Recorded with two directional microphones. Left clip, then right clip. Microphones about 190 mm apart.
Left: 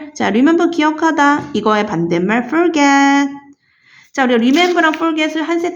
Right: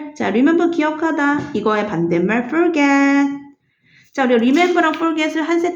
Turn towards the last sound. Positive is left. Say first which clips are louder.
# left 1 dB
turn(degrees=15)  # may be behind; listen again after turning